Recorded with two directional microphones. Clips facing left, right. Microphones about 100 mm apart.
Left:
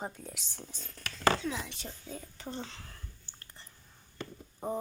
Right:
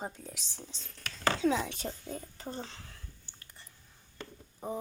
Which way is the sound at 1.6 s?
50° right (ahead or behind).